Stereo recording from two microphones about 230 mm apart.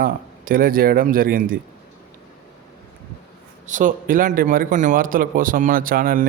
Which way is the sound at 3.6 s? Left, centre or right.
Right.